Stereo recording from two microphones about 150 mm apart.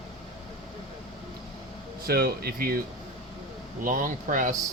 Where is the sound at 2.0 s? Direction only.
90° right.